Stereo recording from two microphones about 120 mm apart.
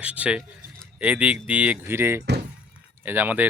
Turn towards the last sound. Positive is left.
turn(degrees=-15)  # may be behind; listen again after turning